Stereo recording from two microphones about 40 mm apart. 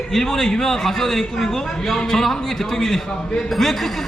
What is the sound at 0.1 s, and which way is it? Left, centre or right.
A man's voice, centre.